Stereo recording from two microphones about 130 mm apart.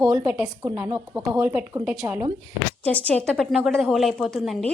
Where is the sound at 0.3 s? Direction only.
15° right (ahead or behind).